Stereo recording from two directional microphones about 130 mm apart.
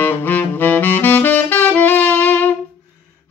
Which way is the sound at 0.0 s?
15° left (ahead or behind).